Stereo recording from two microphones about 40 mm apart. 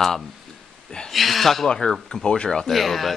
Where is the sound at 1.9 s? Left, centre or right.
Centre.